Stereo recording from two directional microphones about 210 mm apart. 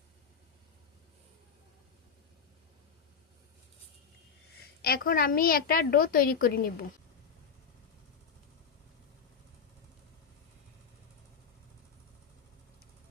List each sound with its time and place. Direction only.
4.8 s a child's voice: 45° left (ahead or behind)